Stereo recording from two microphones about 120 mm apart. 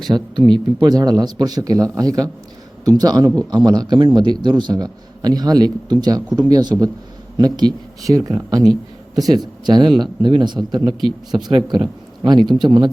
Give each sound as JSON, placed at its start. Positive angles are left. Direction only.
{"t": 0.1, "sound": "a man's voice", "side_deg": -30}
{"t": 8.6, "sound": "speech", "side_deg": 0}
{"t": 9.2, "sound": "a man's voice", "side_deg": -35}